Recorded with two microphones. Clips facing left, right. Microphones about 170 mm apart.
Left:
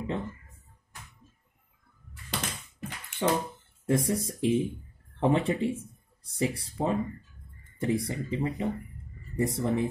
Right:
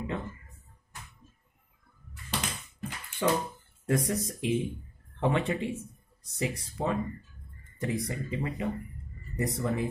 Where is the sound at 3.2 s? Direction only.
20° left (ahead or behind).